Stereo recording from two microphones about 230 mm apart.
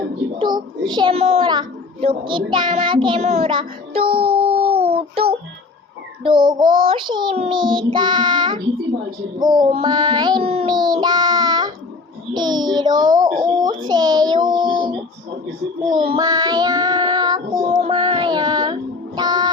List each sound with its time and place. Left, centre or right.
0.3 s a child's voice: centre
6.2 s child singing: right